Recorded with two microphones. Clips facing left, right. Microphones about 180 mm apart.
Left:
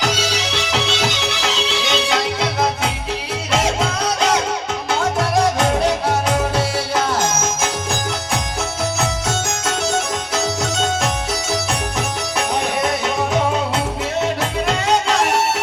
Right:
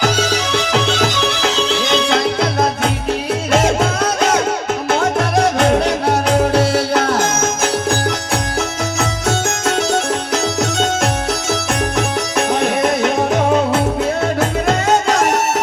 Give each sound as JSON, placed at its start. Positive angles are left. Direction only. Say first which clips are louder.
{"t": 0.7, "sound": "music", "louder": "right 3 dB", "side_deg": -50}
{"t": 5.5, "sound": "music", "louder": "right 3 dB", "side_deg": -65}
{"t": 13.0, "sound": "music", "louder": "right 4 dB", "side_deg": -60}
{"t": 14.3, "sound": "music", "louder": "right 4 dB", "side_deg": -45}